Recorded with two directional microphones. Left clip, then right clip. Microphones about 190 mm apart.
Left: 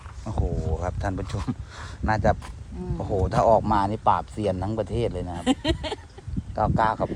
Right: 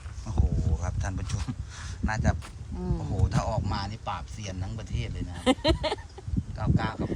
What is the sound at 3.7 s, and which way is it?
Speech, centre (ahead or behind).